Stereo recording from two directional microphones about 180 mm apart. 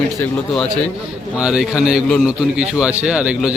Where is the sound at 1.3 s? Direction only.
5° right (ahead or behind).